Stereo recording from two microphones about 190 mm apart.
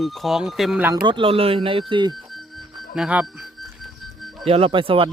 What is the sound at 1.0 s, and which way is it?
Speech, 25° right (ahead or behind).